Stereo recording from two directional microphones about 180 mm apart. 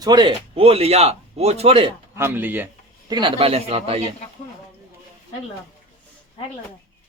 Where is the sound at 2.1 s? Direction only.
10° right (ahead or behind).